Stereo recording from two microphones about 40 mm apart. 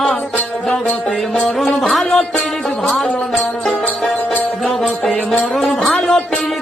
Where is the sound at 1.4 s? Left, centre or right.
Centre.